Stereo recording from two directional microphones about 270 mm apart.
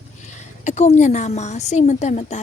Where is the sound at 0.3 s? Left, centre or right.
Left.